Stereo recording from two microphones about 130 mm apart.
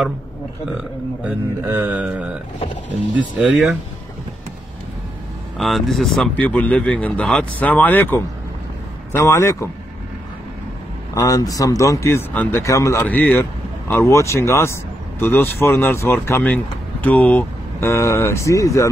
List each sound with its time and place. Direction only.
1.2 s speech: 15° right (ahead or behind)
5.6 s speech: centre (ahead or behind); by 9.7 s 20° left (ahead or behind)
11.1 s speech: 30° left (ahead or behind)
13.0 s speech: 15° left (ahead or behind)